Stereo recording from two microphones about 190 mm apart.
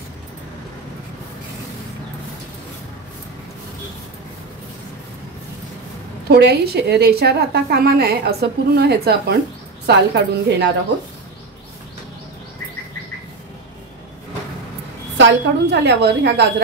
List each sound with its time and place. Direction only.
6.2 s a woman's voice: 55° right (ahead or behind)
15.1 s a woman's voice: 65° right (ahead or behind)